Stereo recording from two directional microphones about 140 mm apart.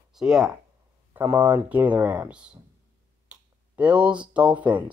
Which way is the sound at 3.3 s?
10° right (ahead or behind).